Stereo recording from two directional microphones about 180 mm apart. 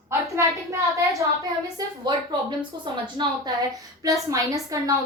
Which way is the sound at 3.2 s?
20° right (ahead or behind).